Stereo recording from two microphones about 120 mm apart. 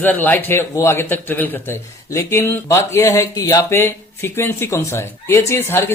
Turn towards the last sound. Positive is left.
turn(degrees=20)  # may be behind; listen again after turning